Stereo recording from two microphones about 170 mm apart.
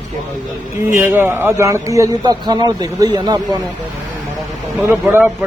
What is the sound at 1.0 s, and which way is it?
A man's voice, 10° right (ahead or behind).